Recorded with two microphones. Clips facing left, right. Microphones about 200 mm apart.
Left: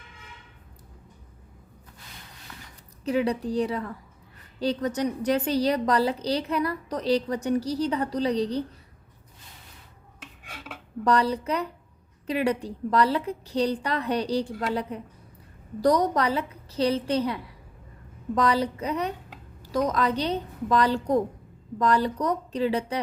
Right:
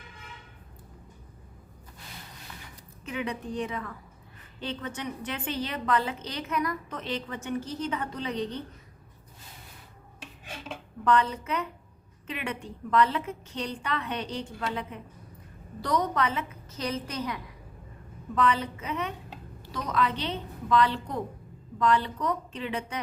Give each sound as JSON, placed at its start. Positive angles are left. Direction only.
{"t": 3.0, "sound": "a woman's voice", "side_deg": 35}
{"t": 10.2, "sound": "filing", "side_deg": -25}
{"t": 11.0, "sound": "a woman's voice", "side_deg": 35}